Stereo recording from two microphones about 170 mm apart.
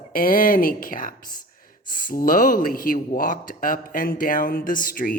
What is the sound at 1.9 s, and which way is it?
Speech, 50° left (ahead or behind).